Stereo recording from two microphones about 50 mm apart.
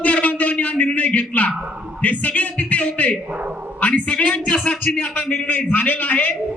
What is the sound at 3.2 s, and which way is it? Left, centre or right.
Dog, right.